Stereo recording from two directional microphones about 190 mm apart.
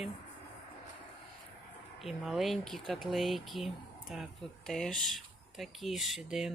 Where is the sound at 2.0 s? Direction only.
Centre (ahead or behind).